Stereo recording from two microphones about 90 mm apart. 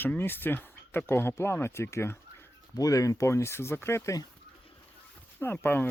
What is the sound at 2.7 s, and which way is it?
Speech, 40° left (ahead or behind).